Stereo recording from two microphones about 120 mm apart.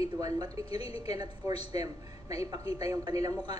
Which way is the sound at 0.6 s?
55° left (ahead or behind).